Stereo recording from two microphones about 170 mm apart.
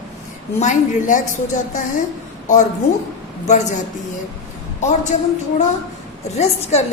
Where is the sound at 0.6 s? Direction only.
45° left (ahead or behind).